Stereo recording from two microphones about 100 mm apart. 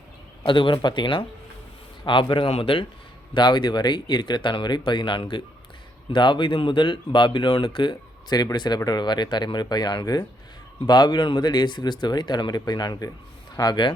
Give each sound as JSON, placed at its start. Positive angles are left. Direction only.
{"t": 0.4, "sound": "speech", "side_deg": 55}
{"t": 3.3, "sound": "speech", "side_deg": 50}